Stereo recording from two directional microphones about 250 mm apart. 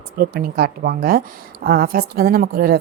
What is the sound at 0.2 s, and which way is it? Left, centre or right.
A woman's voice, right.